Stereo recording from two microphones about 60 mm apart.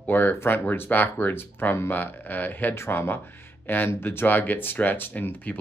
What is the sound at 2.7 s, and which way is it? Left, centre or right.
Speech, left.